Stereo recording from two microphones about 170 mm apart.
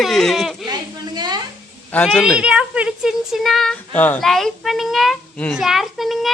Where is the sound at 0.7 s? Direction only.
25° right (ahead or behind).